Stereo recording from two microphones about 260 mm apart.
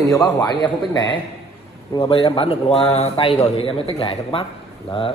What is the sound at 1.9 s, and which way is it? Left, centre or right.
A man's voice, left.